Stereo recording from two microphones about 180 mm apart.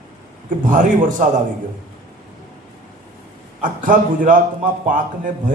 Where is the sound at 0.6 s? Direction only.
45° right (ahead or behind).